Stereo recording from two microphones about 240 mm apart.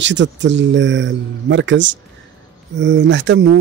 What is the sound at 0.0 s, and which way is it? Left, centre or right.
Speech, right.